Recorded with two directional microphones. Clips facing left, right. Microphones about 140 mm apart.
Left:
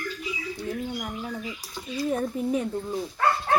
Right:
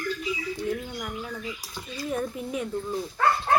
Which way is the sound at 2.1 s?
35° left (ahead or behind).